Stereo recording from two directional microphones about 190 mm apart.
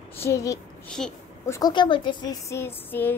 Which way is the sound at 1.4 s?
20° left (ahead or behind).